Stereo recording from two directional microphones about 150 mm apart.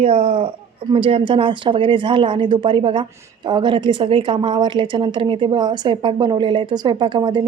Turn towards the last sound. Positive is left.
turn(degrees=-30)  # may be behind; listen again after turning